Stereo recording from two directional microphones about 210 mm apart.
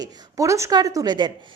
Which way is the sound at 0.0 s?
15° right (ahead or behind).